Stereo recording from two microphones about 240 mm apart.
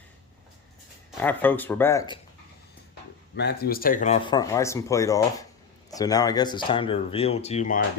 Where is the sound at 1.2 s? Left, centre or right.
Centre.